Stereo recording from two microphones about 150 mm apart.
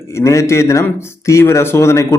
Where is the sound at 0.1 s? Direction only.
20° left (ahead or behind).